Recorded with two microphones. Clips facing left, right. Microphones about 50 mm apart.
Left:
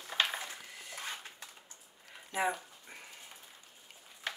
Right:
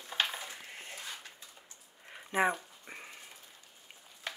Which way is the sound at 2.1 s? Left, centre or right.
Right.